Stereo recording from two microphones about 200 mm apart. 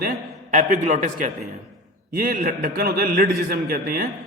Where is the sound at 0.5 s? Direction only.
40° right (ahead or behind).